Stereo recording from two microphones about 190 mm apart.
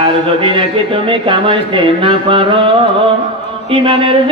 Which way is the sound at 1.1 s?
25° right (ahead or behind).